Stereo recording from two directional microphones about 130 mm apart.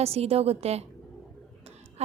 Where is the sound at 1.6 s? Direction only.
55° right (ahead or behind).